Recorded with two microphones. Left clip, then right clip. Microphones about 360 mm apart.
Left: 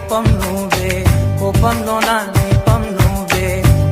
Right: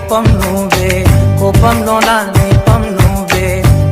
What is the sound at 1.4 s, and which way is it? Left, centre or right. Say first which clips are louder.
Music: right 5 dB; right.